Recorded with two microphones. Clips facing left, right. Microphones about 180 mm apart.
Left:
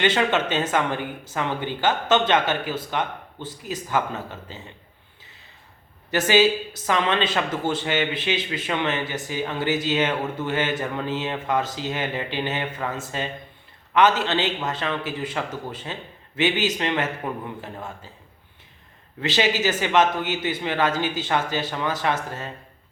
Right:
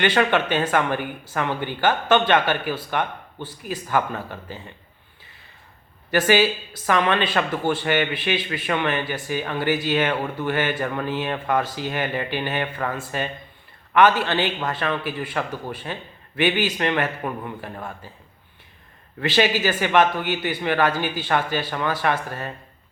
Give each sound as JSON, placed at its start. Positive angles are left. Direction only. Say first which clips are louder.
{"t": 0.0, "sound": "speech", "louder": "right 1 dB", "side_deg": 20}
{"t": 6.1, "sound": "speech", "louder": "even", "side_deg": 20}
{"t": 19.2, "sound": "speech", "louder": "right 2 dB", "side_deg": 20}